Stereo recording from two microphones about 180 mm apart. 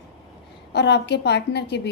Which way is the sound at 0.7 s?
70° left (ahead or behind).